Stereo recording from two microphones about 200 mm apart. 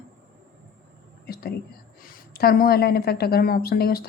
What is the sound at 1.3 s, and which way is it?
A woman's voice, 50° left (ahead or behind).